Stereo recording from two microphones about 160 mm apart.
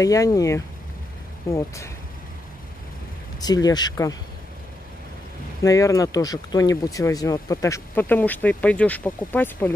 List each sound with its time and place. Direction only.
0.0 s speech: 20° left (ahead or behind)
3.3 s speech: 25° left (ahead or behind)
5.6 s speech: 20° left (ahead or behind)